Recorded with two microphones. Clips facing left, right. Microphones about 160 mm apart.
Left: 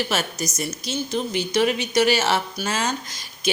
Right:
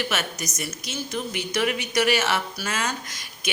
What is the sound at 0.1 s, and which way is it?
A man's voice, 30° left (ahead or behind).